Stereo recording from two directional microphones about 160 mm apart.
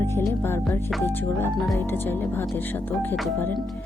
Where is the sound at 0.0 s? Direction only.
15° left (ahead or behind).